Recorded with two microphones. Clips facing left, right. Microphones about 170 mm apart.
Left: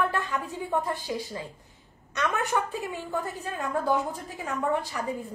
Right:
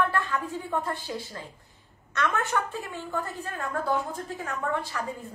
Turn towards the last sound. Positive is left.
turn(degrees=20)  # may be behind; listen again after turning